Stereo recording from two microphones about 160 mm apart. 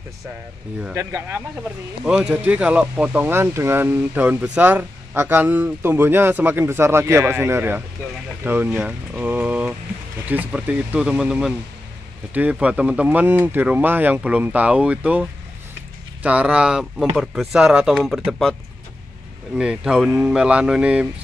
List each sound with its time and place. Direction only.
0.9 s speech: 15° right (ahead or behind)
1.6 s speech: 5° right (ahead or behind)